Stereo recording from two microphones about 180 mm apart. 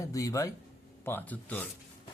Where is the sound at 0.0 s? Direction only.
20° left (ahead or behind).